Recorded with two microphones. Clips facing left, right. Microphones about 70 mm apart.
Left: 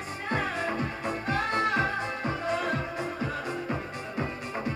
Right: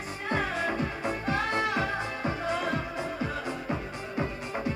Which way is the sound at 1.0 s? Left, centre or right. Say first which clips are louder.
Even; left.